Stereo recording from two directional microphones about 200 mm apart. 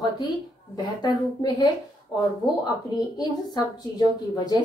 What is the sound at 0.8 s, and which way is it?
Speech, 20° left (ahead or behind).